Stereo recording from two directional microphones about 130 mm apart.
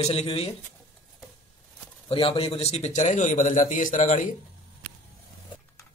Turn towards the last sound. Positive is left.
turn(degrees=75)  # may be behind; listen again after turning